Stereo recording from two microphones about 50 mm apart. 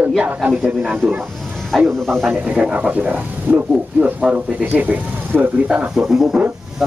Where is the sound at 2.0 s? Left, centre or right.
Centre.